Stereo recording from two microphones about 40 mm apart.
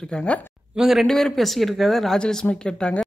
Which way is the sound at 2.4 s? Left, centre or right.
Left.